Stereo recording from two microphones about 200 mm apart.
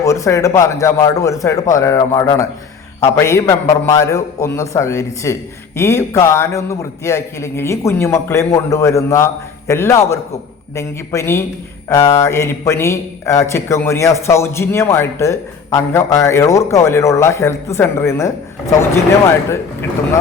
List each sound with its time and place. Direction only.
0.0 s a man's voice: 15° left (ahead or behind)